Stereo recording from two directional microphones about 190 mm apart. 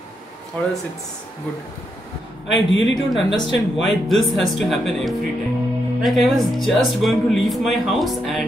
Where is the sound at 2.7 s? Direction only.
75° left (ahead or behind).